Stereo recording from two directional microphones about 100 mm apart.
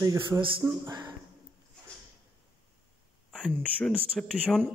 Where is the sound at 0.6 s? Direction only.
25° right (ahead or behind).